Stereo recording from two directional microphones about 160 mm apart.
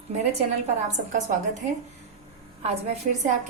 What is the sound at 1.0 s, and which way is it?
Speech, 80° right.